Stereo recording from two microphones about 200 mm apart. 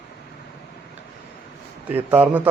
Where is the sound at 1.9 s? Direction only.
10° right (ahead or behind).